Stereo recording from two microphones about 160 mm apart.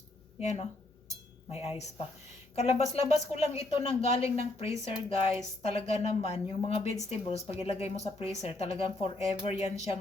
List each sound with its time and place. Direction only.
0.3 s speech: 45° left (ahead or behind)